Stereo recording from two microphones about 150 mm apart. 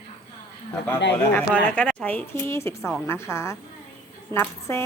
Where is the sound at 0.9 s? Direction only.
10° left (ahead or behind).